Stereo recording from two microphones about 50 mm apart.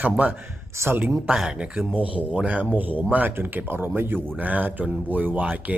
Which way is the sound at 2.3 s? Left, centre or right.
Right.